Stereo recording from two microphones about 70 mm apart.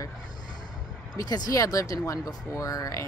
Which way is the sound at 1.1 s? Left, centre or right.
Left.